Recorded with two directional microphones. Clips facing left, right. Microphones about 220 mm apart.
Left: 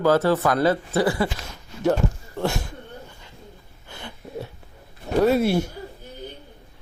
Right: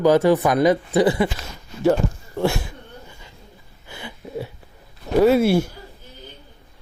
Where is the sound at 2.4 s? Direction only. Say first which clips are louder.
Right 4 dB; 5° right (ahead or behind).